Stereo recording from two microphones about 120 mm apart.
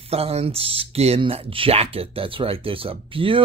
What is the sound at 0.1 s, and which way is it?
Speech, 60° right (ahead or behind).